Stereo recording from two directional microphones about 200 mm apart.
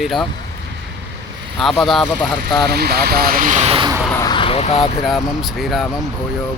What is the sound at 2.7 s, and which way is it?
Speech, 50° right (ahead or behind).